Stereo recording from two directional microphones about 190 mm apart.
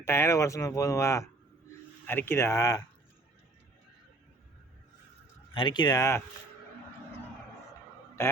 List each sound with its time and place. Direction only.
0.0 s speech: 15° left (ahead or behind)
5.5 s speech: 25° left (ahead or behind)